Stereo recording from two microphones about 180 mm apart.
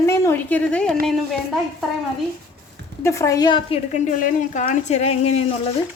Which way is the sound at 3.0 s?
15° left (ahead or behind).